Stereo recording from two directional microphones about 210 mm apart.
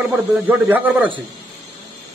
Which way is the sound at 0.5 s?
10° right (ahead or behind).